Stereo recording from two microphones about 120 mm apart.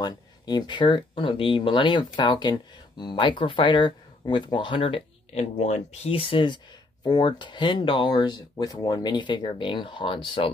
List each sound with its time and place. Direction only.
0.0 s speech: 35° left (ahead or behind)